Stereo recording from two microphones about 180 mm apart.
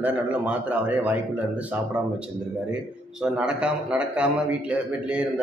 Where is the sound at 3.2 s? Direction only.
5° right (ahead or behind).